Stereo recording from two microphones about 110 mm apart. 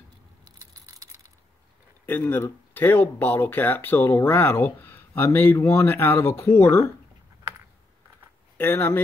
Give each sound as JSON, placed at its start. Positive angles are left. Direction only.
{"t": 0.5, "sound": "keys jangling", "side_deg": -30}
{"t": 2.0, "sound": "speech", "side_deg": 20}
{"t": 8.5, "sound": "speech", "side_deg": 20}